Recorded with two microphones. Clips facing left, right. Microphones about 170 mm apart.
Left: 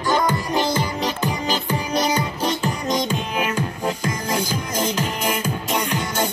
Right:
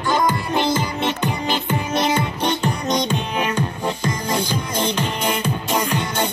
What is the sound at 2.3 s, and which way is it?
Music, centre (ahead or behind).